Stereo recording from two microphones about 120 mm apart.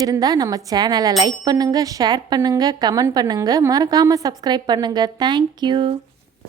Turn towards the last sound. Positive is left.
turn(degrees=-40)  # may be behind; listen again after turning